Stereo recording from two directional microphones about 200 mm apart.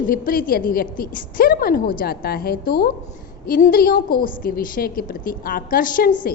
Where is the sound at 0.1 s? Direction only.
45° left (ahead or behind).